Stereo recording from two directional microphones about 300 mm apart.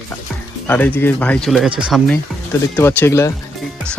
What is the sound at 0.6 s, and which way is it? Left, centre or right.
Speech, centre.